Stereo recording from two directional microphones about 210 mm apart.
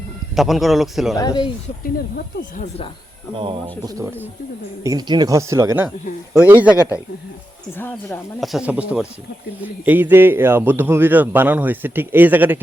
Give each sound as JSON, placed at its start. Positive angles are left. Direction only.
{"t": 0.3, "sound": "a man's voice", "side_deg": 0}
{"t": 1.1, "sound": "speech", "side_deg": 15}
{"t": 1.8, "sound": "speech", "side_deg": 45}
{"t": 3.3, "sound": "a man's voice", "side_deg": -25}
{"t": 7.8, "sound": "speech", "side_deg": 10}
{"t": 8.5, "sound": "a man's voice", "side_deg": -5}